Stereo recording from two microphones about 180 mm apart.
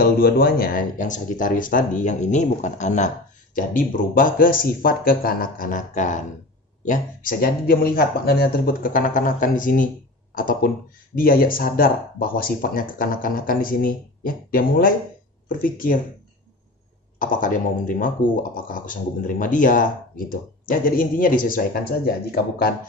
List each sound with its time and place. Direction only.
0.0 s speech: 55° left (ahead or behind)
17.2 s speech: 50° left (ahead or behind)